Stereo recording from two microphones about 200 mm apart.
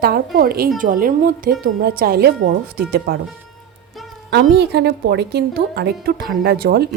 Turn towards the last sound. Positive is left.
turn(degrees=-50)  # may be behind; listen again after turning